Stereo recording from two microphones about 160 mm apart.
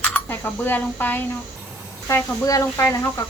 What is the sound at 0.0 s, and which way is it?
A woman's voice, 10° left (ahead or behind).